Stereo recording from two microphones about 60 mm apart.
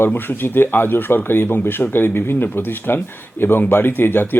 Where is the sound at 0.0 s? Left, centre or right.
Left.